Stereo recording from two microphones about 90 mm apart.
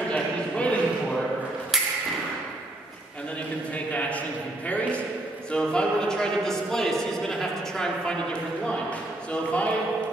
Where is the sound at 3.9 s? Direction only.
15° left (ahead or behind).